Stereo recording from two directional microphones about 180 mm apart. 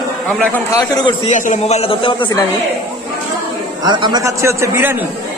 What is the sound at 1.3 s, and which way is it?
A man's voice, 45° left (ahead or behind).